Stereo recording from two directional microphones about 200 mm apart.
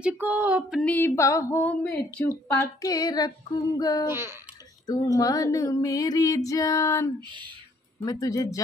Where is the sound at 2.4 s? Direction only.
10° left (ahead or behind).